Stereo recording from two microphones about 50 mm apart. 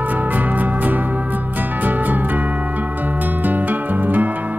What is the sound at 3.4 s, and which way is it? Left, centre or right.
Music, right.